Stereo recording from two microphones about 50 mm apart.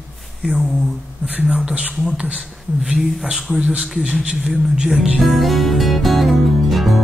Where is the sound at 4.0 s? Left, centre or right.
Right.